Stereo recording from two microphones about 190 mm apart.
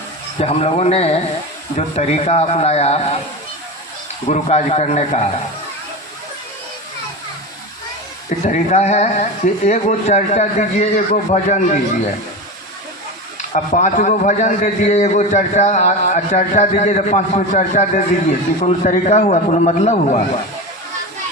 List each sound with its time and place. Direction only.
0.3 s a man's voice: 35° left (ahead or behind)
4.3 s a man's voice: 35° left (ahead or behind)
8.4 s a man's voice: 35° left (ahead or behind)
13.5 s a man's voice: 40° left (ahead or behind)